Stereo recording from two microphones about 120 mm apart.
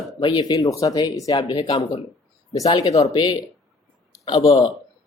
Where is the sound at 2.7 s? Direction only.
30° left (ahead or behind).